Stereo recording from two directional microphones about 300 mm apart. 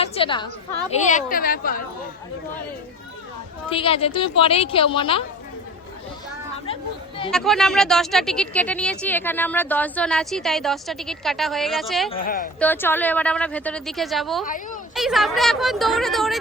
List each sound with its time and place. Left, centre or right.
0.0 s a sound: centre
1.0 s speech: left
3.7 s a woman's voice: centre
7.3 s speech: centre
12.1 s speech: left
12.5 s speech: centre
14.4 s speech: left
14.9 s speech: centre